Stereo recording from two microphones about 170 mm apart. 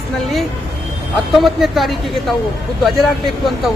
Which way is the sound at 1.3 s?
Centre (ahead or behind).